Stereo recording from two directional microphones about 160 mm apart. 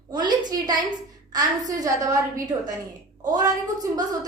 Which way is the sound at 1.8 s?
20° right (ahead or behind).